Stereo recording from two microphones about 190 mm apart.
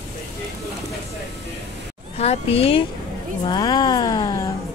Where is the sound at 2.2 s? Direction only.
30° left (ahead or behind).